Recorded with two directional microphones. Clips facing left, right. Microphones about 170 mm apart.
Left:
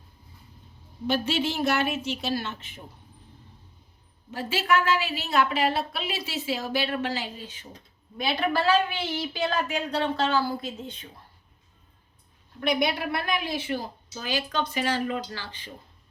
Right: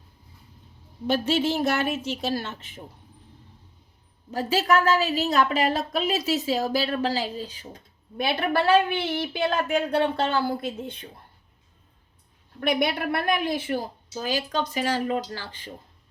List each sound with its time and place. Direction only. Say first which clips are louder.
1.0 s a woman's voice: right 3 dB; 45° right (ahead or behind)
4.3 s a woman's voice: right 3 dB; 40° right (ahead or behind)
8.2 s a woman's voice: right 2 dB; 55° right (ahead or behind)
12.5 s a woman's voice: right 1 dB; 55° right (ahead or behind)